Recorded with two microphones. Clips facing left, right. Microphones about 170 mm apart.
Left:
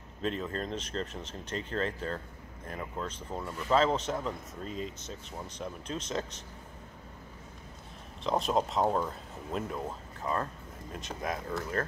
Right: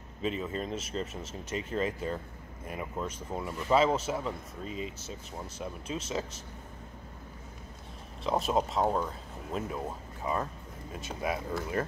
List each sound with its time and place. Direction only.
0.2 s speech: 5° right (ahead or behind)
8.2 s speech: 5° right (ahead or behind)